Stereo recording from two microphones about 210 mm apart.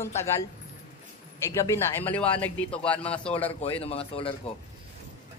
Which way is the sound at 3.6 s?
30° left (ahead or behind).